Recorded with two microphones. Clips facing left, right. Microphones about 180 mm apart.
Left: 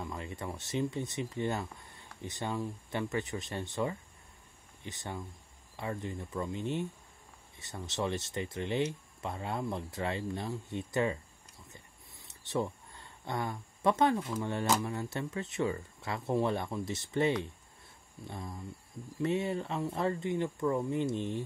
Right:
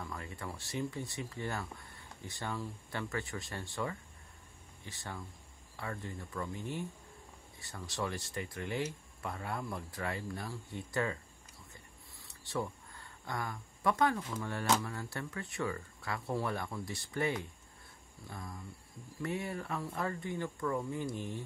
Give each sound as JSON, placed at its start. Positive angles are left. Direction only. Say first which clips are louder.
{"t": 0.0, "sound": "speech", "louder": "left 4 dB", "side_deg": 20}
{"t": 11.7, "sound": "a sound", "louder": "left 1 dB", "side_deg": 20}
{"t": 14.8, "sound": "speech", "louder": "left 5 dB", "side_deg": 20}